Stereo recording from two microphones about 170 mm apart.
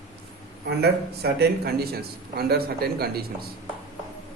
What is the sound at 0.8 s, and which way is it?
A man's voice, 70° right (ahead or behind).